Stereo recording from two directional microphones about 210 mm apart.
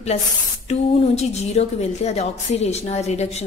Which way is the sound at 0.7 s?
30° left (ahead or behind).